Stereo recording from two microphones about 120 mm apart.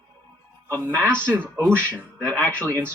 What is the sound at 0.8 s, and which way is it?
Speech, 15° right (ahead or behind).